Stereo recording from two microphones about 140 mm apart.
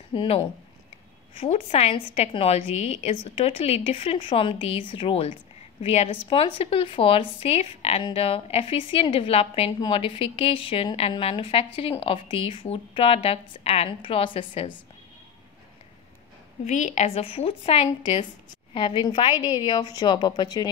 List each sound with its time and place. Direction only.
0.1 s a woman's voice: 35° left (ahead or behind)
1.4 s a woman's voice: 45° left (ahead or behind)
16.6 s a woman's voice: 60° left (ahead or behind)
18.7 s a woman's voice: 35° left (ahead or behind)